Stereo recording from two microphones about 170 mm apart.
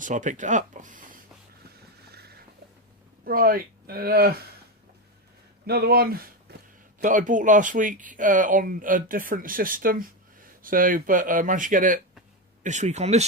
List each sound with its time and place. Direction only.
0.0 s speech: 45° right (ahead or behind)
1.7 s vehicle: 70° right (ahead or behind)
3.2 s speech: 60° right (ahead or behind)
5.6 s speech: 65° right (ahead or behind)
6.5 s a sound: 70° right (ahead or behind)
7.0 s speech: 50° right (ahead or behind)